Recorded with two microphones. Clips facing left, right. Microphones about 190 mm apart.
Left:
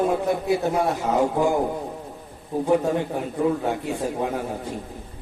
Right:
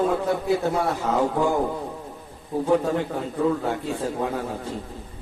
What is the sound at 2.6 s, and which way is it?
A man's voice, 15° left (ahead or behind).